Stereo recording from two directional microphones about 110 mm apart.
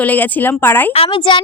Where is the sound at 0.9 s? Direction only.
55° left (ahead or behind).